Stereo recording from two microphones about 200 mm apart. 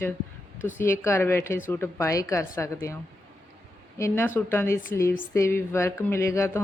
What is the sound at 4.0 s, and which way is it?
A woman's voice, 10° left (ahead or behind).